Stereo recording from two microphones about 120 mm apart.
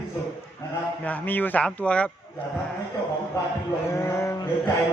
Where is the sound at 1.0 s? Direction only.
15° left (ahead or behind).